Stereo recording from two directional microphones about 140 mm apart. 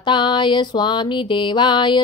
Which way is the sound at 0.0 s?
35° left (ahead or behind).